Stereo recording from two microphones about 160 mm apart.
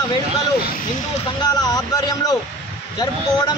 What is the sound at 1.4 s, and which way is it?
A man's voice, 25° left (ahead or behind).